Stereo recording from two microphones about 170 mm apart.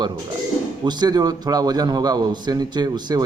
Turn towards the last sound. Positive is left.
turn(degrees=-25)  # may be behind; listen again after turning